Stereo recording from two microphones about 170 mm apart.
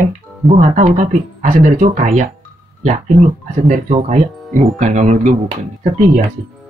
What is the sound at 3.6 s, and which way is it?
Speech, 45° right (ahead or behind).